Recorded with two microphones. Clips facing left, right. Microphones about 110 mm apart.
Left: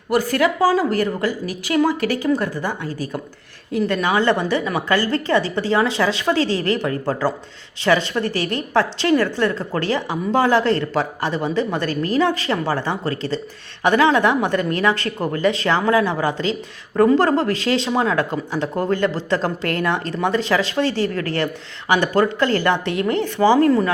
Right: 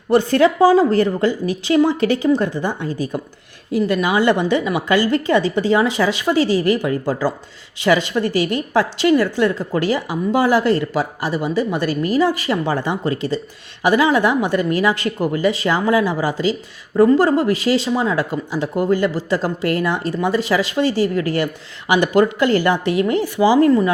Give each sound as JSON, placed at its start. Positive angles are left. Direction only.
{"t": 0.1, "sound": "a woman's voice", "side_deg": -25}
{"t": 3.7, "sound": "a woman's voice", "side_deg": -10}